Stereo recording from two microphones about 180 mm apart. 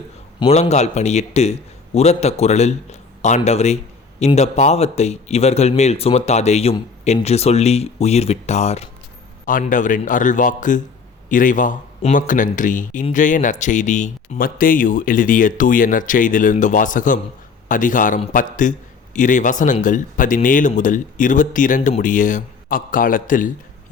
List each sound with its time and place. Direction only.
0.3 s speech: 35° left (ahead or behind)
9.5 s speech: 50° left (ahead or behind)